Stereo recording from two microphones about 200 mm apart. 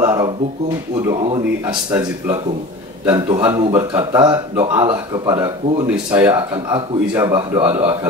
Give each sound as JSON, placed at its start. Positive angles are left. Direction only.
{"t": 0.0, "sound": "a sound", "side_deg": -15}
{"t": 1.0, "sound": "a man's voice", "side_deg": -25}
{"t": 1.9, "sound": "a man's voice", "side_deg": -10}